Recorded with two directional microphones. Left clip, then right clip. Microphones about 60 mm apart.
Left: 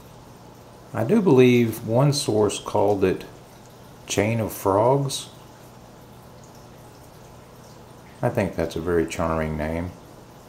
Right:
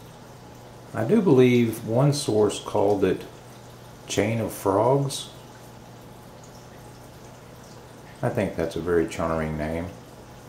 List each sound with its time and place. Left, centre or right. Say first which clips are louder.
0.9 s speech: left 1 dB; left
4.1 s speech: left 2 dB; left
8.2 s speech: left 2 dB; left